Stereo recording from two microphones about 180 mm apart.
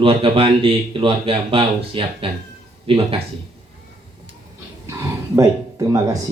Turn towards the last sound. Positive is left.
turn(degrees=-20)  # may be behind; listen again after turning